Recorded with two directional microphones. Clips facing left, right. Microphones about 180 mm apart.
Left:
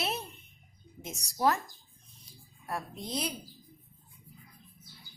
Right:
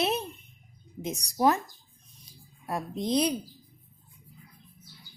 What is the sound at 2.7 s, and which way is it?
Speech, 20° right (ahead or behind).